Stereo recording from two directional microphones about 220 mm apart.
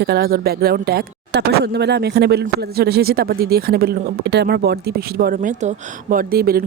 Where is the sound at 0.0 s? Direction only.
45° right (ahead or behind).